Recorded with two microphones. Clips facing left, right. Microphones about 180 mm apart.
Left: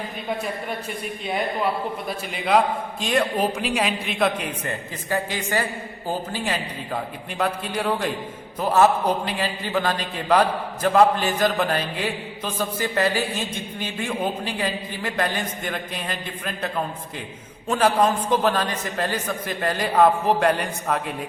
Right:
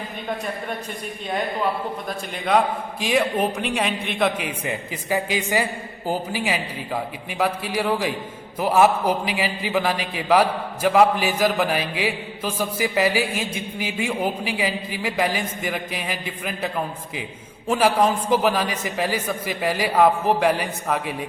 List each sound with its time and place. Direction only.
2.0 s a man's voice: 5° left (ahead or behind)